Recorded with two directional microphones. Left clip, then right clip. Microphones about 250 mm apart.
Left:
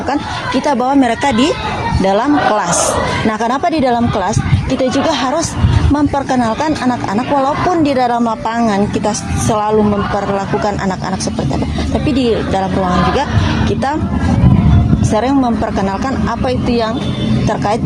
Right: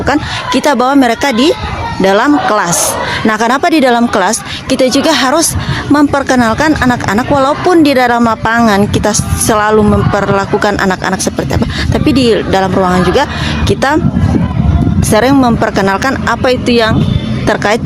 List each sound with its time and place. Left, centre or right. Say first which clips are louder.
0.1 s speech: right 5 dB; right
12.0 s speech: right 6 dB; right
15.1 s speech: right 6 dB; right